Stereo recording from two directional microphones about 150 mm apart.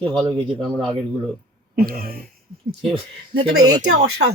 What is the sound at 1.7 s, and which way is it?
Speech, 90° right.